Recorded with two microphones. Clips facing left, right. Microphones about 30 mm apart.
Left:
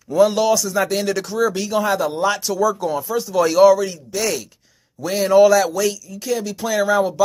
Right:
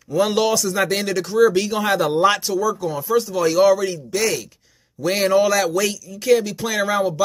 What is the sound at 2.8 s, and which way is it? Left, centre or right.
Speech, centre.